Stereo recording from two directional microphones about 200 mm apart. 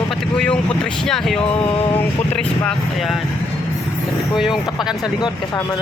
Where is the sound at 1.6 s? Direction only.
25° left (ahead or behind).